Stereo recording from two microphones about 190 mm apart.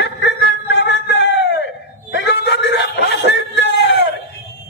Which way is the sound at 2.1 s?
60° left (ahead or behind).